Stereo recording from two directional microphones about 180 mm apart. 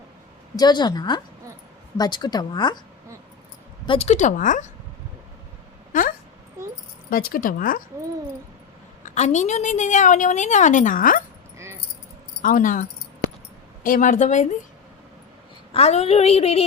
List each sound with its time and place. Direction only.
0.5 s a woman's voice: 25° left (ahead or behind)
3.8 s a woman's voice: 35° left (ahead or behind)
5.9 s a sound: 50° left (ahead or behind)
7.1 s a woman's voice: 55° left (ahead or behind)
9.0 s a woman's voice: 40° left (ahead or behind)
11.5 s keys jangling: 15° right (ahead or behind)
12.4 s a woman's voice: 50° left (ahead or behind)
15.7 s a woman's voice: 35° left (ahead or behind)